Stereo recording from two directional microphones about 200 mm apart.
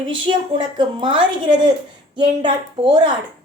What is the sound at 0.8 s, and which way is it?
A woman's voice, 25° right (ahead or behind).